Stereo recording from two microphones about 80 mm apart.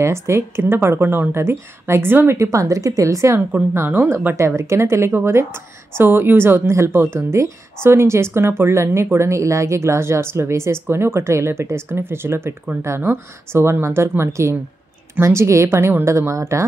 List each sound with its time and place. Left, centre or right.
0.0 s speech: right
3.3 s speech: right
4.4 s speech: right